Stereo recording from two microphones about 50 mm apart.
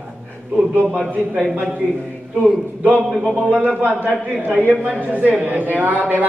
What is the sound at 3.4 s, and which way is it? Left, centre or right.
Speech, right.